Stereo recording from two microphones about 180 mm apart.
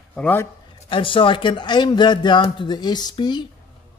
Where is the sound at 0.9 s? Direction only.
30° left (ahead or behind).